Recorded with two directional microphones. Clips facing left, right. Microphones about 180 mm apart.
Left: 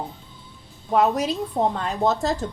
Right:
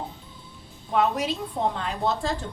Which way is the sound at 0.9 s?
40° left (ahead or behind).